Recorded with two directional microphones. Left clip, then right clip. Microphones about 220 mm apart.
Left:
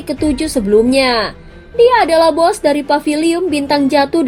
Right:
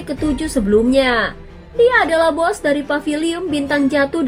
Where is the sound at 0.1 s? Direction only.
25° left (ahead or behind).